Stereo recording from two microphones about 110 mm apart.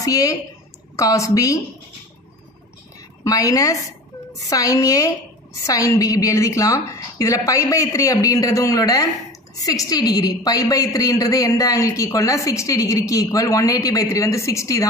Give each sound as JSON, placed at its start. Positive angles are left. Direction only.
{"t": 0.0, "sound": "a woman's voice", "side_deg": 30}
{"t": 3.3, "sound": "a woman's voice", "side_deg": 30}